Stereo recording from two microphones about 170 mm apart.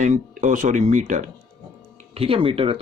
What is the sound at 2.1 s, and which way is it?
Speech, 35° right (ahead or behind).